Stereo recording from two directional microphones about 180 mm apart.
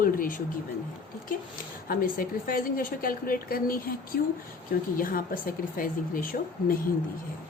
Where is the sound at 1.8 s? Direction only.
50° left (ahead or behind).